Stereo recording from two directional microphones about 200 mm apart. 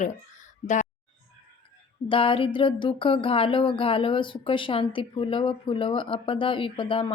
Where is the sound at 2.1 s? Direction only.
25° left (ahead or behind).